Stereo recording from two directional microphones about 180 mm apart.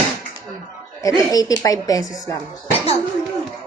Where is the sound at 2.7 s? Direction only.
35° left (ahead or behind).